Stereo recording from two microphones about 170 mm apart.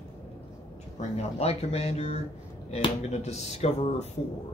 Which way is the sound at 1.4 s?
40° left (ahead or behind).